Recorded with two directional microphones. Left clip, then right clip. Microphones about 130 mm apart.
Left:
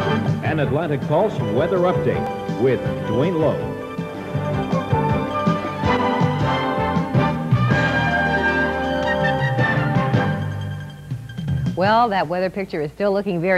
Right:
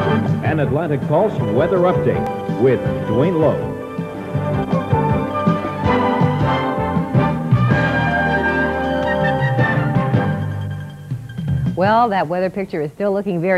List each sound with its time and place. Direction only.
0.0 s speech: 35° left (ahead or behind)
4.5 s music: 35° left (ahead or behind)
11.8 s a man's voice: 35° left (ahead or behind)